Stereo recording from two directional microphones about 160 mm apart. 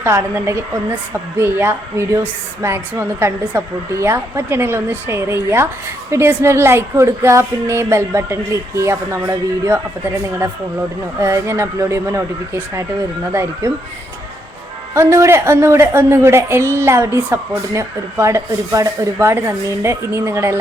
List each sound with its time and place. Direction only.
0.0 s speech: 15° right (ahead or behind)
11.2 s speech: 20° right (ahead or behind)
13.3 s speech: 15° right (ahead or behind)
14.9 s speech: 20° right (ahead or behind)